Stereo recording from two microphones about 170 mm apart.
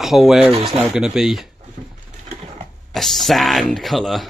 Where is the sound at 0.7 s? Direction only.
5° right (ahead or behind).